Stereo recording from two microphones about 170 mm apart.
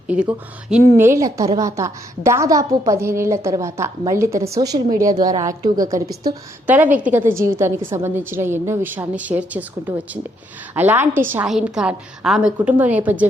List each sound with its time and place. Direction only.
0.1 s a woman's voice: 5° right (ahead or behind); by 6.3 s 20° right (ahead or behind)
6.7 s a woman's voice: 10° right (ahead or behind)